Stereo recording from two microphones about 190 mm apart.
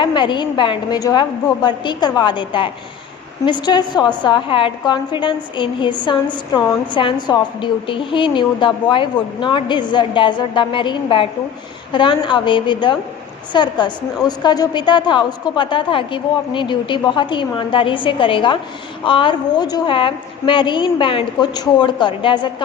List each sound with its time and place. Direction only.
0.0 s a woman's voice: 25° left (ahead or behind)